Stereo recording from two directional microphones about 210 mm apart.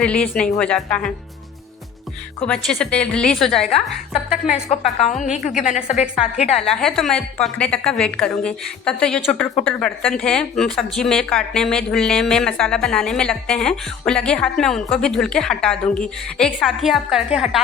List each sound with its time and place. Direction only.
0.0 s a woman's voice: 5° left (ahead or behind)
2.5 s a woman's voice: 5° left (ahead or behind)
5.2 s speech: 35° left (ahead or behind)
6.7 s a woman's voice: centre (ahead or behind)